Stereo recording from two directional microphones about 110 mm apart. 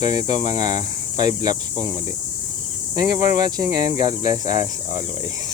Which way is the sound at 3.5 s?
40° right (ahead or behind).